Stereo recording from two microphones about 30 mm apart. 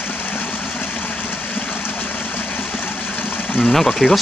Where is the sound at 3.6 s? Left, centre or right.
Centre.